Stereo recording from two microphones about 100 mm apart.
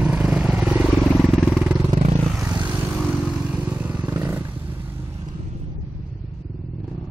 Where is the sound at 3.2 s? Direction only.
15° right (ahead or behind).